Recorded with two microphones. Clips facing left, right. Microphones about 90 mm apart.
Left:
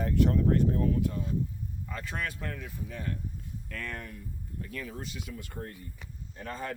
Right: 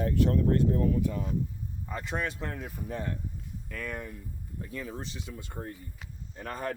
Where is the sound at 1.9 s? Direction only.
20° right (ahead or behind).